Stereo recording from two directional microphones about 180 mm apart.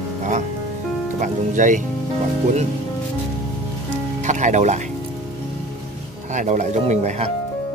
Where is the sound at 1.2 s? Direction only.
45° right (ahead or behind).